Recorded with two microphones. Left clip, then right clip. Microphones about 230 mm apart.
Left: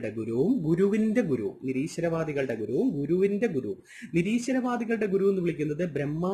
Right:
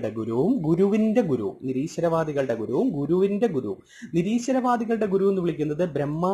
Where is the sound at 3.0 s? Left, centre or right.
Centre.